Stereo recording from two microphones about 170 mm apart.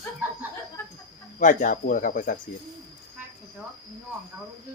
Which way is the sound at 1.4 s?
50° left (ahead or behind).